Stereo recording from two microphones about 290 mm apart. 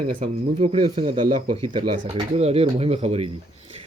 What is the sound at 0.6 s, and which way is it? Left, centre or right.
Speech, right.